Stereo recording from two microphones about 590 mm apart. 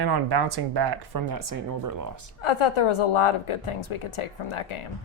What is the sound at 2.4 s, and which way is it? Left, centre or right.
A woman's voice, left.